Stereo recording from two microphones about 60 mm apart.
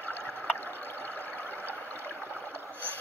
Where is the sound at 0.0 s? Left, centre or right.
Left.